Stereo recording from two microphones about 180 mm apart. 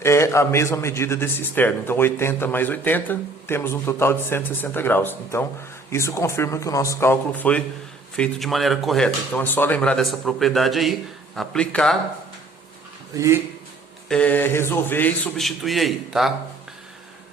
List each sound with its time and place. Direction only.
0.0 s a man's voice: 15° left (ahead or behind)
13.1 s speech: 15° right (ahead or behind)
14.1 s a man's voice: 10° left (ahead or behind)